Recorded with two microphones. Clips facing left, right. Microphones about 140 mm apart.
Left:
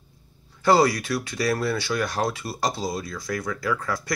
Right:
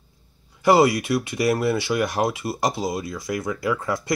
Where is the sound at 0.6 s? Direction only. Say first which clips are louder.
Right 2 dB; 15° right (ahead or behind).